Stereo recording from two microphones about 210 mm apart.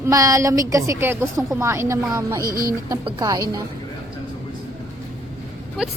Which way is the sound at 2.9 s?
15° right (ahead or behind).